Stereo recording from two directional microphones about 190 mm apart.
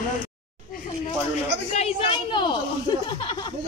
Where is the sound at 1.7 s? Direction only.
35° left (ahead or behind).